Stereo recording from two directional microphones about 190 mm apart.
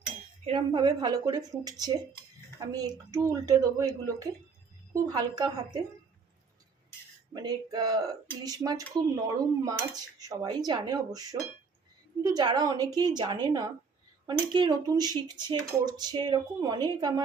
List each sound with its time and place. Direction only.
0.4 s speech: 25° right (ahead or behind)
7.3 s speech: 20° right (ahead or behind)